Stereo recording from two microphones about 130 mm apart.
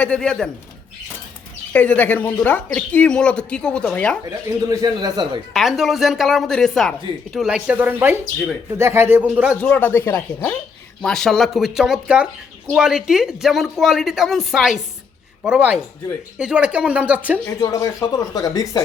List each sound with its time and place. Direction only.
0.0 s speech: 10° left (ahead or behind)
1.7 s speech: 10° left (ahead or behind)
4.7 s a man's voice: 30° right (ahead or behind)
5.5 s speech: centre (ahead or behind)
9.6 s speech: 15° left (ahead or behind)
11.0 s speech: 5° left (ahead or behind)
17.6 s speech: 25° left (ahead or behind)